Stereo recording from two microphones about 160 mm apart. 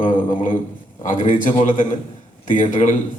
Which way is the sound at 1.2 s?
55° left (ahead or behind).